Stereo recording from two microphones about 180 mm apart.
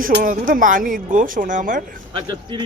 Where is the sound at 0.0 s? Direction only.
50° right (ahead or behind).